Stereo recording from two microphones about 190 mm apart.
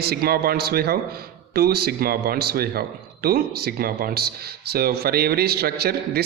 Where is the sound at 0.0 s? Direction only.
55° right (ahead or behind).